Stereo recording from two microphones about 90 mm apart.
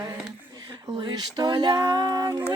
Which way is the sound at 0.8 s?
50° right (ahead or behind).